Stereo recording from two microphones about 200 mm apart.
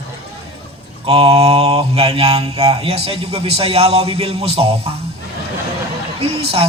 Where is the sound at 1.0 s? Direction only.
30° right (ahead or behind).